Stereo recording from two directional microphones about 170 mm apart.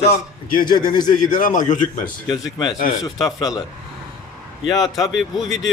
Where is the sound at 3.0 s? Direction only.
20° left (ahead or behind).